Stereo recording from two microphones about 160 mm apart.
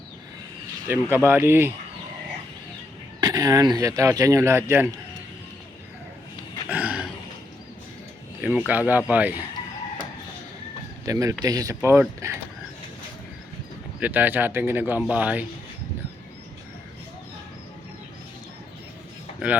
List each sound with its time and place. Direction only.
1.1 s speech: 15° right (ahead or behind)
3.2 s speech: 25° right (ahead or behind)
6.7 s a sound: 10° right (ahead or behind)
8.4 s speech: 10° right (ahead or behind)
11.0 s speech: 20° right (ahead or behind)
14.0 s speech: 10° right (ahead or behind)
19.4 s speech: 10° right (ahead or behind)